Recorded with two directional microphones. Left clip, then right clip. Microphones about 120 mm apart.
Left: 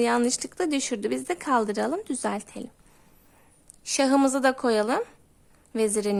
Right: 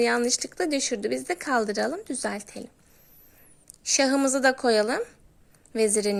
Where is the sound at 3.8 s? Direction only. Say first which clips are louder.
Left 1 dB; 15° left (ahead or behind).